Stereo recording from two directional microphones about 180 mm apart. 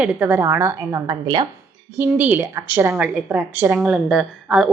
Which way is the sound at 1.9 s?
10° right (ahead or behind).